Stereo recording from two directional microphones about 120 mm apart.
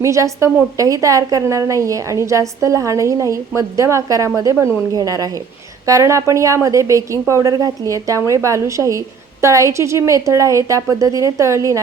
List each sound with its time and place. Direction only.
0.0 s a woman's voice: 25° right (ahead or behind)